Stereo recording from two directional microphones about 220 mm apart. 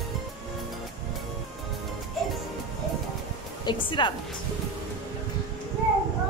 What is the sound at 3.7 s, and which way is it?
Speech, 20° left (ahead or behind).